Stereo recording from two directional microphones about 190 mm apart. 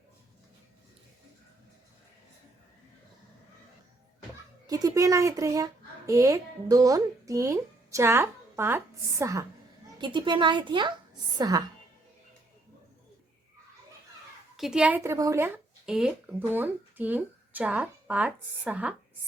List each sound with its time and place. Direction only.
4.6 s a child's voice: 20° right (ahead or behind)
14.5 s speech: centre (ahead or behind)